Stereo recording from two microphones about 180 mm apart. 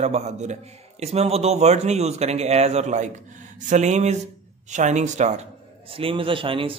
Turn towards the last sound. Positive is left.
turn(degrees=-30)  # may be behind; listen again after turning